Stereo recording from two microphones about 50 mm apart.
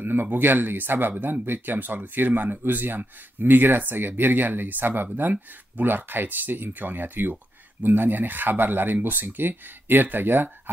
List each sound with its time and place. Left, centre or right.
0.0 s speech: right